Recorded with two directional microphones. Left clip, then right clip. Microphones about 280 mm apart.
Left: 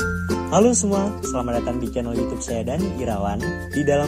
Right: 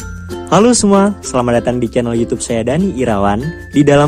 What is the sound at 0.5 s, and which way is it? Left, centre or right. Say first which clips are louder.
Speech: right 8 dB; right.